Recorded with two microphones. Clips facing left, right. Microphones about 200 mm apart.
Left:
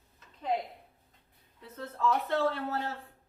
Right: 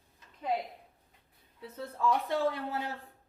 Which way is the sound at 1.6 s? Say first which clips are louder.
Even; 10° right (ahead or behind).